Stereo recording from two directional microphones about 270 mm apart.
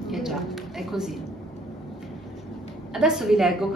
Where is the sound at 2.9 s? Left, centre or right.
Centre.